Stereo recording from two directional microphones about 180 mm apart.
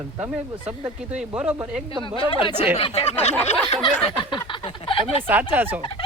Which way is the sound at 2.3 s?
25° left (ahead or behind).